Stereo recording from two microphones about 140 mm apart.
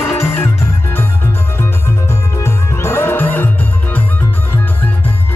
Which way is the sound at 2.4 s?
15° left (ahead or behind).